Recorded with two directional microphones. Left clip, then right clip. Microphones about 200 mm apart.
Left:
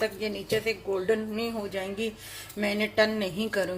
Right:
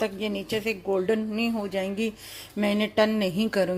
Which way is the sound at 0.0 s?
40° right (ahead or behind).